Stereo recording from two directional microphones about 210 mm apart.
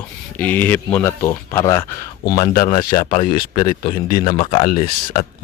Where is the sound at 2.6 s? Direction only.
40° left (ahead or behind).